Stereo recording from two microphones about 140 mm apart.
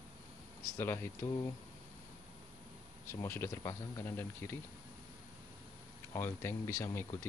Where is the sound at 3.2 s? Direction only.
20° left (ahead or behind).